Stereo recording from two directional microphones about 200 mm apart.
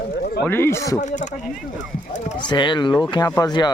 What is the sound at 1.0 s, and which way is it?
Speech, 35° left (ahead or behind).